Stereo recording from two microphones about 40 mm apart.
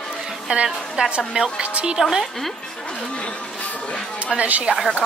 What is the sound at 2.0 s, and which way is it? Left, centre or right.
Music, centre.